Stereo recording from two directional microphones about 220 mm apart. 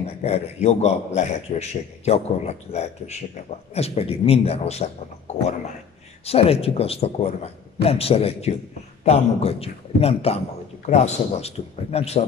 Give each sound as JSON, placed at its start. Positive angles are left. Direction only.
{"t": 0.0, "sound": "a man's voice", "side_deg": 30}
{"t": 6.2, "sound": "a man's voice", "side_deg": 25}